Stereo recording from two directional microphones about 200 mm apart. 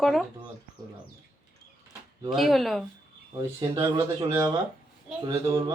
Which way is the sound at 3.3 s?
20° right (ahead or behind).